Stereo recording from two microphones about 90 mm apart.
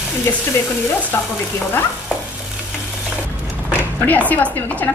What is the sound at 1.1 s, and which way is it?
Speech, 25° left (ahead or behind).